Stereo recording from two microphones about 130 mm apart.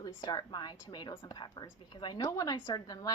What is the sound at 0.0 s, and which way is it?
A woman's voice, 30° left (ahead or behind).